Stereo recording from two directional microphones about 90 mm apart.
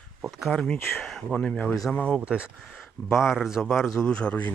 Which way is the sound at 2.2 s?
10° right (ahead or behind).